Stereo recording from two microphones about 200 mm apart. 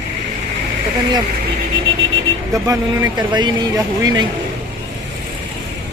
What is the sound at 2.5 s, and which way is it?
Speech, 15° right (ahead or behind).